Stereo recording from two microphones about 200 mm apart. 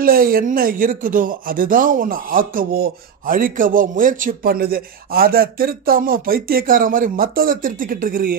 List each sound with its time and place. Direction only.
0.0 s speech: 45° right (ahead or behind)